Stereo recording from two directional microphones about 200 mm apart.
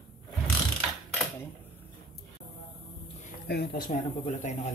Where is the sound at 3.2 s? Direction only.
55° left (ahead or behind); by 4.7 s 40° left (ahead or behind).